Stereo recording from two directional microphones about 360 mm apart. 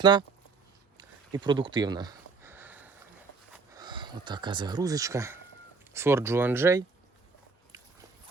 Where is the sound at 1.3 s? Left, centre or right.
Centre.